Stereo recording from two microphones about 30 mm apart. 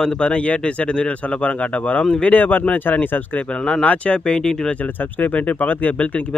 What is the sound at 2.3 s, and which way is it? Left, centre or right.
Speech, left.